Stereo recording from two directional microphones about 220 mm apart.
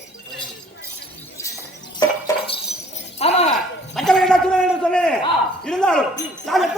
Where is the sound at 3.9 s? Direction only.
Centre (ahead or behind).